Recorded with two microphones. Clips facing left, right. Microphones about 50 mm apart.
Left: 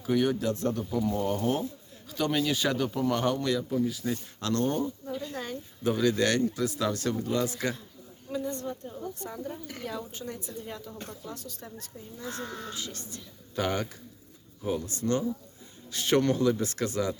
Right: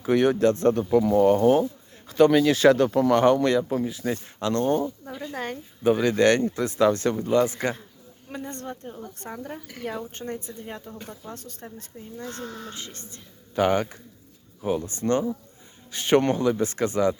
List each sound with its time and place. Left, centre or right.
0.1 s speech: right
0.5 s a woman's voice: right
0.9 s speech: right
2.0 s a man's voice: right
2.3 s speech: right
4.0 s a woman's voice: right
4.4 s speech: right
5.3 s a woman's voice: right
5.8 s speech: right
8.3 s a woman's voice: right
10.3 s speech: right
10.9 s speech: centre
11.3 s speech: right